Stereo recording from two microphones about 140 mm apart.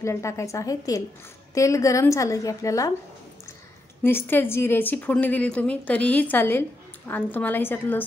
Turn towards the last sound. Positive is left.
turn(degrees=15)  # may be behind; listen again after turning